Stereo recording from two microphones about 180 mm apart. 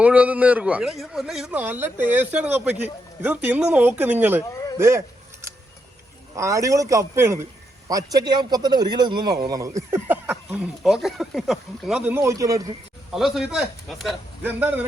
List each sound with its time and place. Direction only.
0.0 s a man's voice: 10° right (ahead or behind)
4.8 s a sound: 15° right (ahead or behind)
6.3 s a man's voice: 20° right (ahead or behind)
12.1 s a man's voice: 15° right (ahead or behind)
13.1 s a man's voice: centre (ahead or behind)